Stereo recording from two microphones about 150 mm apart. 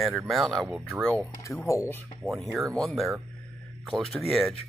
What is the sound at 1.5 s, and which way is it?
Speech, 20° left (ahead or behind).